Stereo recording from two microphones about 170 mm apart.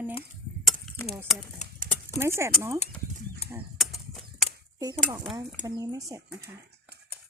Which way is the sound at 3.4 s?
35° left (ahead or behind).